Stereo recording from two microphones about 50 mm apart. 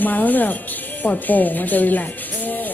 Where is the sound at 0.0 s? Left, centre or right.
Left.